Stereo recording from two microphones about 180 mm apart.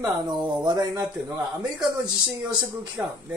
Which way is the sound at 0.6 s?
20° right (ahead or behind).